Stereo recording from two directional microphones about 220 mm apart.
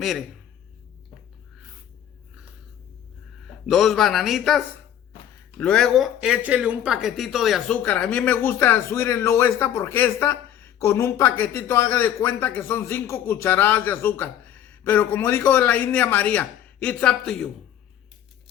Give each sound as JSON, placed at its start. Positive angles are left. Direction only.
{"t": 0.0, "sound": "speech", "side_deg": 0}
{"t": 3.4, "sound": "a man's voice", "side_deg": 0}